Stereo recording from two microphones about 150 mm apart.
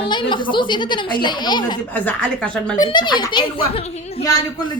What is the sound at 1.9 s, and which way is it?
Speech, 10° left (ahead or behind).